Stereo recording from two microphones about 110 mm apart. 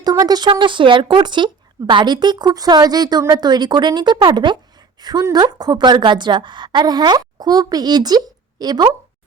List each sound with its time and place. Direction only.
0.0 s a woman's voice: 35° right (ahead or behind)